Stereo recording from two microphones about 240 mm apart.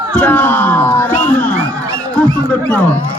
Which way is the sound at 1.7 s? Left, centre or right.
Centre.